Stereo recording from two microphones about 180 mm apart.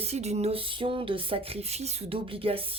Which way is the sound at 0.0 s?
35° right (ahead or behind).